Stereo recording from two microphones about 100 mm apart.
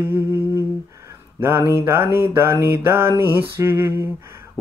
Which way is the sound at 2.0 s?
20° right (ahead or behind).